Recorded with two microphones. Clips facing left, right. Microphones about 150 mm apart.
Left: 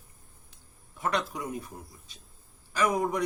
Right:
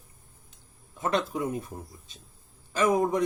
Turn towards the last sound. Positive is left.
turn(degrees=-25)  # may be behind; listen again after turning